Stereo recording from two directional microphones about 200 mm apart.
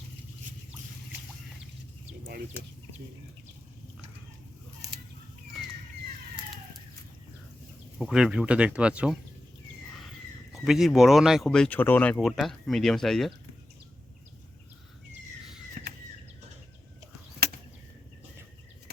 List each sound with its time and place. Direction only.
4.8 s a sound: 20° right (ahead or behind)
7.9 s speech: centre (ahead or behind)
10.5 s speech: centre (ahead or behind)